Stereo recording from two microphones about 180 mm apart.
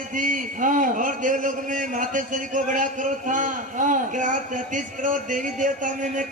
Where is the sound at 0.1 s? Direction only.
45° right (ahead or behind).